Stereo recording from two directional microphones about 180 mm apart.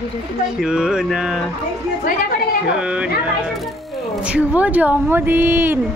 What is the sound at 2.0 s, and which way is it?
Speech, 55° left (ahead or behind).